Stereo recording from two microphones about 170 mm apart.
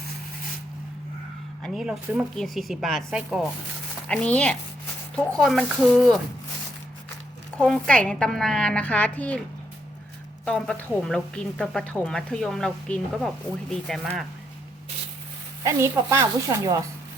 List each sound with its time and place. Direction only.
1.6 s a woman's voice: centre (ahead or behind)
7.5 s speech: 5° left (ahead or behind)
10.4 s speech: 5° left (ahead or behind)
15.6 s speech: 15° right (ahead or behind)